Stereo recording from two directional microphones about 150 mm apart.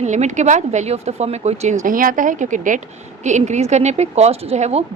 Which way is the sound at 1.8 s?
65° right (ahead or behind).